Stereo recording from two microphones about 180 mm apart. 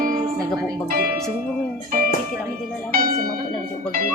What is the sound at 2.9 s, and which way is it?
Music, 55° right (ahead or behind).